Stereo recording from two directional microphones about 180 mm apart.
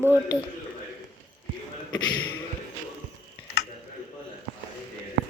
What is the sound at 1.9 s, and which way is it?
Speech, 25° left (ahead or behind).